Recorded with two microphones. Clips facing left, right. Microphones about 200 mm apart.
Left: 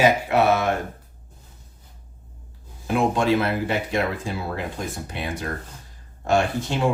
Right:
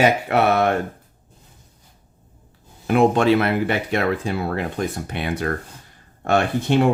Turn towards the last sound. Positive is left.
turn(degrees=-60)  # may be behind; listen again after turning